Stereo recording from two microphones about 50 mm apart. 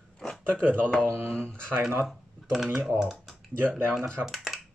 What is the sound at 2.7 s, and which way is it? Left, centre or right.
Speech, centre.